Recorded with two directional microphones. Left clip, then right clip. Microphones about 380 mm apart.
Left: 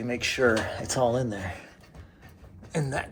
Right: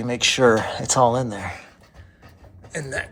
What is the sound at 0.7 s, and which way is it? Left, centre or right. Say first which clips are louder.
Speech: right 7 dB; centre.